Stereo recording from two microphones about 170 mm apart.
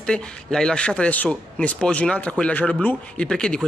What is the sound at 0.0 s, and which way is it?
Speech, 5° left (ahead or behind).